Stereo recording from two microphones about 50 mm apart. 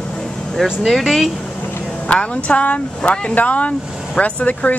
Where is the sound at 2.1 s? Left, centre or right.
Left.